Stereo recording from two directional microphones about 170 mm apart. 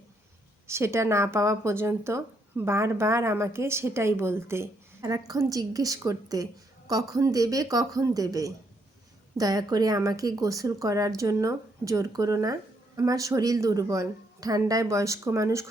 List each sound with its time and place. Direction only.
0.7 s a woman's voice: 15° right (ahead or behind)